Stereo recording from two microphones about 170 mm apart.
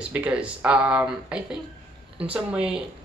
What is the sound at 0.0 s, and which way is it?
Speech, 5° right (ahead or behind).